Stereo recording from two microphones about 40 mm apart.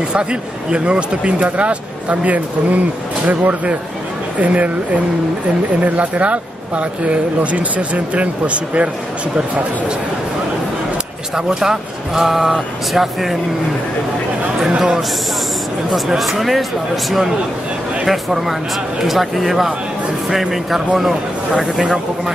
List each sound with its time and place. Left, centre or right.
0.1 s speech: right
5.8 s speech: right
11.3 s speech: centre
16.2 s speech: centre